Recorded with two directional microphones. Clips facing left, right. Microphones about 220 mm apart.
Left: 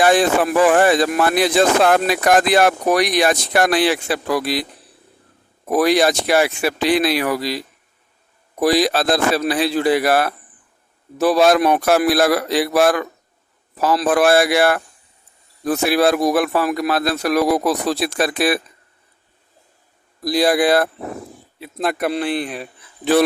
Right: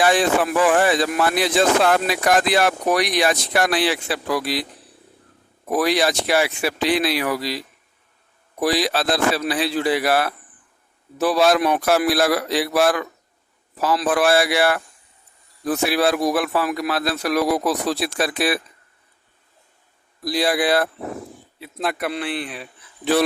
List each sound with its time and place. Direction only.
0.0 s speech: 45° left (ahead or behind)
5.7 s speech: 45° left (ahead or behind)
8.6 s speech: 45° left (ahead or behind)
20.2 s speech: 45° left (ahead or behind)